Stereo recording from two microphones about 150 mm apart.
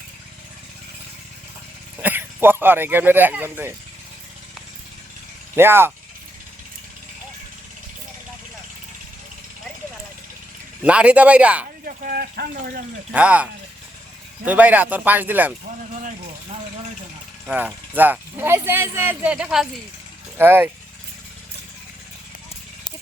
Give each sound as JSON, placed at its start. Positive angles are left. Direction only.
{"t": 2.0, "sound": "speech", "side_deg": -10}
{"t": 5.5, "sound": "speech", "side_deg": -15}
{"t": 10.8, "sound": "speech", "side_deg": -10}
{"t": 11.9, "sound": "speech", "side_deg": -85}
{"t": 13.1, "sound": "speech", "side_deg": -10}
{"t": 17.4, "sound": "speech", "side_deg": -10}